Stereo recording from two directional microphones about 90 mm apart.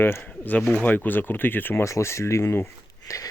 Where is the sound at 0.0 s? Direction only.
20° left (ahead or behind).